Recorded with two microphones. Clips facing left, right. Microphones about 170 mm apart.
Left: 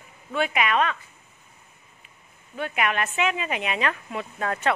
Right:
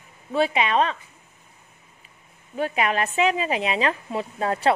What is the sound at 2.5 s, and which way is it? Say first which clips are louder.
Speech: right 3 dB; 35° right (ahead or behind).